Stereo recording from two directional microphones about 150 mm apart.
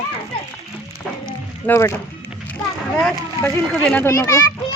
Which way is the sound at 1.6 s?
15° left (ahead or behind).